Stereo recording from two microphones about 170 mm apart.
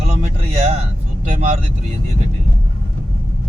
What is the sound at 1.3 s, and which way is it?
Vehicle, 45° right (ahead or behind).